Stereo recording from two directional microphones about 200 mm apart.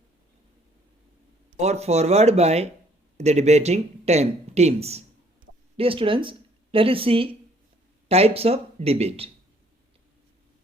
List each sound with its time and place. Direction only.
1.5 s speech: 30° right (ahead or behind)